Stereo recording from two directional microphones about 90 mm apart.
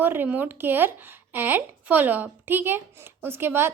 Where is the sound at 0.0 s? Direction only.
20° right (ahead or behind).